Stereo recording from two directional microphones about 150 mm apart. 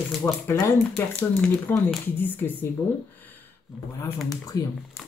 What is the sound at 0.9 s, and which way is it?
Speech, 5° left (ahead or behind).